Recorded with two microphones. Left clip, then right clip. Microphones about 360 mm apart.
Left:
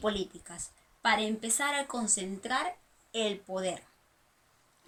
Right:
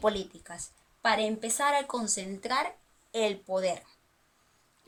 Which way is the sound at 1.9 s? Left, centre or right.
Centre.